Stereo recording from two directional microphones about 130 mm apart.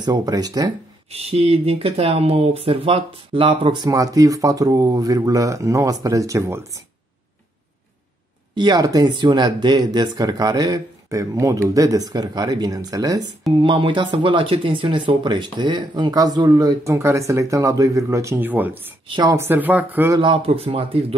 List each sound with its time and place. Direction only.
0.0 s speech: 30° right (ahead or behind)
1.1 s speech: 50° right (ahead or behind); by 6.8 s 25° right (ahead or behind)
8.5 s speech: 30° right (ahead or behind)
13.6 s speech: 40° right (ahead or behind); by 18.9 s 15° right (ahead or behind)
19.0 s speech: 35° right (ahead or behind)
19.3 s speech: 15° right (ahead or behind)
20.2 s speech: 45° right (ahead or behind)